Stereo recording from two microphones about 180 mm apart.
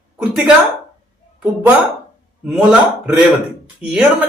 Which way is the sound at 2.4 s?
5° right (ahead or behind).